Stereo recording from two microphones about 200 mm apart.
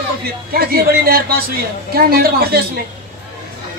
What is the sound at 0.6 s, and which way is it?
A man's voice, 50° right (ahead or behind).